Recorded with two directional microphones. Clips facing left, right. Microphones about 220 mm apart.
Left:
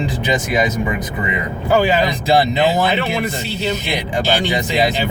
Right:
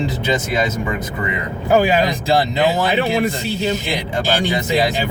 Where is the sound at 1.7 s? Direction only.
15° right (ahead or behind).